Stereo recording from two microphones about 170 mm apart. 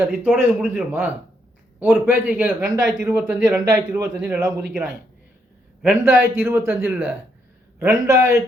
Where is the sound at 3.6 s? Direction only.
20° right (ahead or behind).